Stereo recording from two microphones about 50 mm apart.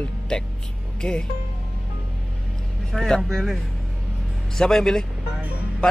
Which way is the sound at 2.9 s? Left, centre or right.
Centre.